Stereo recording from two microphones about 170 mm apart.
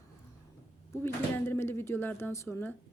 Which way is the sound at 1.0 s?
15° left (ahead or behind).